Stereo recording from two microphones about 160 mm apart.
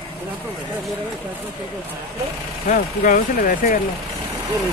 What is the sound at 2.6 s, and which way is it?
Speech, 55° left (ahead or behind).